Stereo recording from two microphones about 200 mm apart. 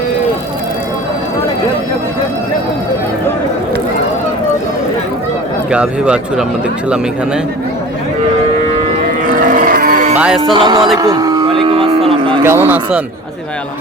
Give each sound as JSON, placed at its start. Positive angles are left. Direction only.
{"t": 5.7, "sound": "speech", "side_deg": -5}
{"t": 9.3, "sound": "livestock", "side_deg": -45}
{"t": 10.4, "sound": "speech", "side_deg": -25}
{"t": 10.9, "sound": "cattle", "side_deg": -20}
{"t": 12.4, "sound": "speech", "side_deg": -10}